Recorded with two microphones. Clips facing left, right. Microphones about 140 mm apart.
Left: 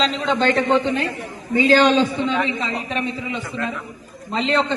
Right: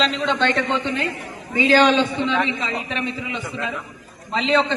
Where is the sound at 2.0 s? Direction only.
Centre (ahead or behind).